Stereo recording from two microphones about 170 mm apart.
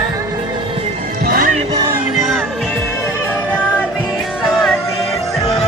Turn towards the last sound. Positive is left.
turn(degrees=0)  # may be behind; listen again after turning